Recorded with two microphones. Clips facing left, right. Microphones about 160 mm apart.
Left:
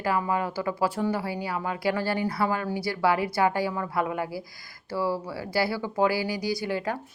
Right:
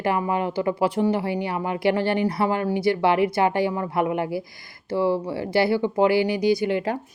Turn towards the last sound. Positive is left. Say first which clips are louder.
# right 7 dB
turn(degrees=-20)  # may be behind; listen again after turning